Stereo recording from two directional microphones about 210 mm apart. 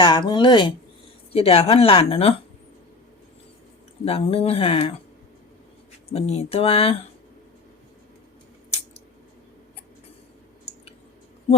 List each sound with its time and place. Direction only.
0.0 s speech: 20° left (ahead or behind)
4.0 s speech: 30° left (ahead or behind)
6.1 s speech: 30° left (ahead or behind)
10.7 s a sound: 30° left (ahead or behind)